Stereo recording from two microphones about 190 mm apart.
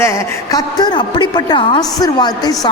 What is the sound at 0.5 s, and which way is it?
A woman's voice, 20° left (ahead or behind).